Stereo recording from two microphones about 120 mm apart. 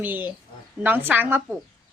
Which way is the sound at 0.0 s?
15° right (ahead or behind).